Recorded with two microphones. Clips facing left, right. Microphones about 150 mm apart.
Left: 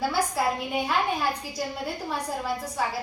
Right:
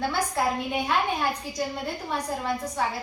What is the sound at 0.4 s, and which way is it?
Speech, 5° left (ahead or behind).